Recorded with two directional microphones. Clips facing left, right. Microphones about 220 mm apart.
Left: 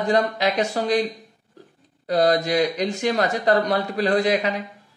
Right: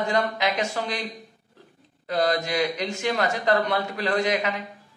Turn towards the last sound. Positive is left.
turn(degrees=35)  # may be behind; listen again after turning